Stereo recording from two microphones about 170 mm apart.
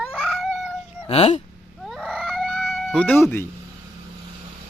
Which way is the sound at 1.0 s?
35° left (ahead or behind).